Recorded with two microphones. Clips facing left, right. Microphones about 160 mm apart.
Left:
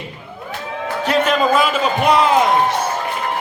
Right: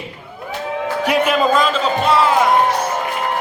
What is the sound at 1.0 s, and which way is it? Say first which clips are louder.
Speech: even; 10° right (ahead or behind).